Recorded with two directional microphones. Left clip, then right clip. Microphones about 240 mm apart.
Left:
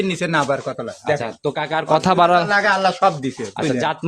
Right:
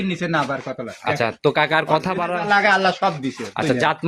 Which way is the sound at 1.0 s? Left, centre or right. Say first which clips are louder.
Right 2 dB; right.